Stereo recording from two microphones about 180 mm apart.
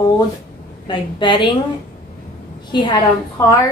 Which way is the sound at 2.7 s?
25° left (ahead or behind).